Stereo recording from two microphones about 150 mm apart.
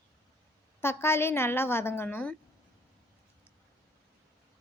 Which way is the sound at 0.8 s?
15° left (ahead or behind).